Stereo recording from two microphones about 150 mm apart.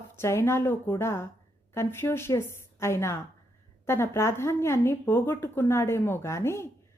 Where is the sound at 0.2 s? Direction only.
15° left (ahead or behind).